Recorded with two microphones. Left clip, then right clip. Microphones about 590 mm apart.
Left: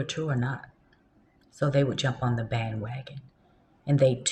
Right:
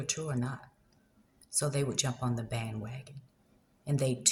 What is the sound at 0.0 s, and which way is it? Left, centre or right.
Speech, right.